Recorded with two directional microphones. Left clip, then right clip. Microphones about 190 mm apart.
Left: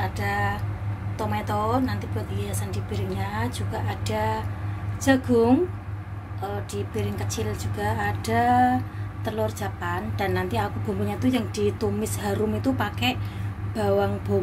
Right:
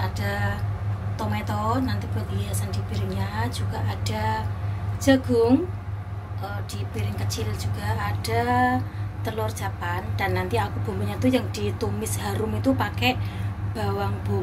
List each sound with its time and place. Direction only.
0.2 s a sound: 30° left (ahead or behind)
1.1 s a woman's voice: 30° left (ahead or behind)
6.7 s a woman's voice: 35° left (ahead or behind)
14.3 s speech: centre (ahead or behind)